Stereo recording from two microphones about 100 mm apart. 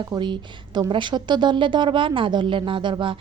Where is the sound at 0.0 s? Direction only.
45° right (ahead or behind).